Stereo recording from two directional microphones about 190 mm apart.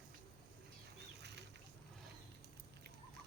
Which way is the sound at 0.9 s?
65° right (ahead or behind).